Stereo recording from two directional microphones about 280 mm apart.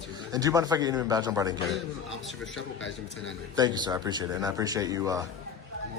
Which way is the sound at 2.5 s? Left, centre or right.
Left.